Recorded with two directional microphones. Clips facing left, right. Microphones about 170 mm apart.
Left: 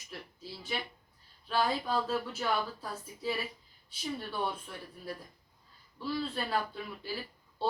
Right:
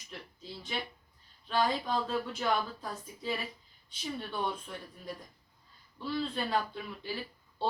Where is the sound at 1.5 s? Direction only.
5° left (ahead or behind).